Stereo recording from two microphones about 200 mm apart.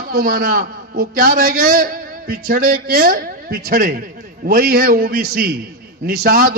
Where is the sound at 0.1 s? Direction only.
50° right (ahead or behind).